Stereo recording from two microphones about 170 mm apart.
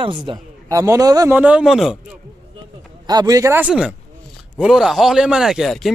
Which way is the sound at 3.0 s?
25° right (ahead or behind).